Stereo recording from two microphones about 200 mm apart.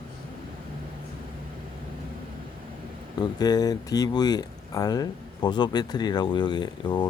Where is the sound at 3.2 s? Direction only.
20° left (ahead or behind).